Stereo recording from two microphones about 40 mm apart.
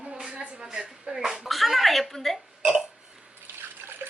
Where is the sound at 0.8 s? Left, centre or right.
Centre.